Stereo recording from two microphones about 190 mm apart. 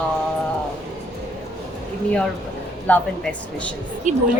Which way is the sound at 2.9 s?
5° left (ahead or behind).